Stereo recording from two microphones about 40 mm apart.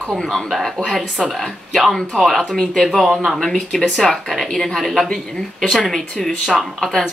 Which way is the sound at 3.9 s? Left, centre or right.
Centre.